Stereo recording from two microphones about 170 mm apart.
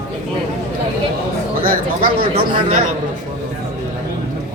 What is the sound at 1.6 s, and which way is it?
Speech, 60° right (ahead or behind).